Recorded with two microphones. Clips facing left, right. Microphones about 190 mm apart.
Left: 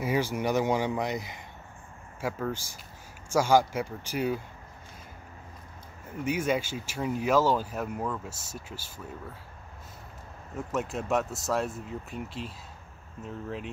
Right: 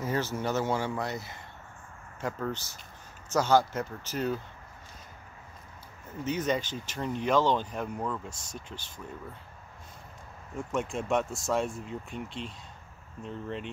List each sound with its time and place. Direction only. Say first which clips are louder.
0.0 s speech: left 3 dB; 10° left (ahead or behind)
6.2 s speech: left 1 dB; 10° left (ahead or behind)
10.5 s speech: even; 5° left (ahead or behind)